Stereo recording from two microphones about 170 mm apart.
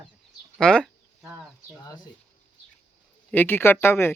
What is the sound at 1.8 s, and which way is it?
Speech, 20° left (ahead or behind).